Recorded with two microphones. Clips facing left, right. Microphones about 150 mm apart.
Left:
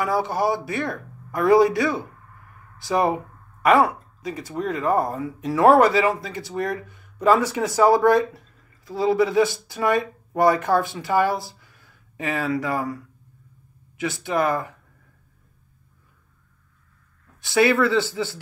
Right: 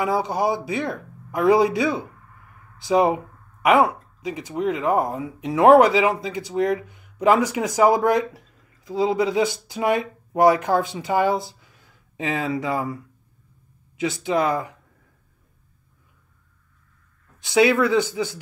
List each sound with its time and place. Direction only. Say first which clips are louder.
0.0 s speech: even; 20° right (ahead or behind)
17.5 s speech: right 1 dB; 20° right (ahead or behind)